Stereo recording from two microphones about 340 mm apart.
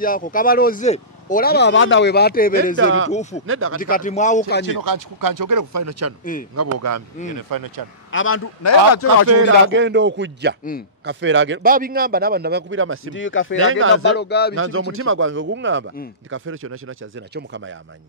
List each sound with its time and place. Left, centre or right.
0.0 s speech: left
2.8 s a man's voice: right
3.1 s speech: centre
3.4 s a man's voice: right
3.9 s speech: left
4.6 s speech: right
7.3 s speech: right
8.1 s a man's voice: left
9.3 s a man's voice: right
13.1 s speech: left
13.6 s a man's voice: right
14.1 s speech: left
14.5 s a man's voice: right